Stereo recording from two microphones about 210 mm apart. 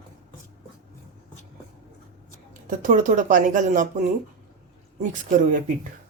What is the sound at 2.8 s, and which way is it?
Speech, 35° right (ahead or behind).